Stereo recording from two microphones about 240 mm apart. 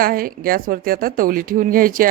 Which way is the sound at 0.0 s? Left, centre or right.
Right.